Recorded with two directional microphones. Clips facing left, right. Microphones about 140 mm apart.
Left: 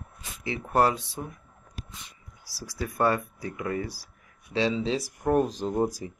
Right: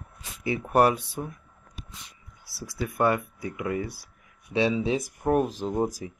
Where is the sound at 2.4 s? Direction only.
25° right (ahead or behind).